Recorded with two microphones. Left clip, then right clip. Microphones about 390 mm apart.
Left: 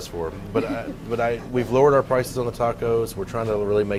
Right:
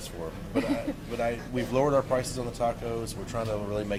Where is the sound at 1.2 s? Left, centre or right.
Left.